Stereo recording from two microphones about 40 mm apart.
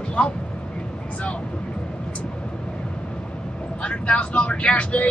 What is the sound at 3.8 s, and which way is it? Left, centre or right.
Speech, left.